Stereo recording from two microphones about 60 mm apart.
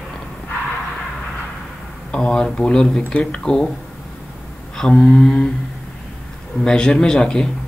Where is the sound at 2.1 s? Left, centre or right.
Centre.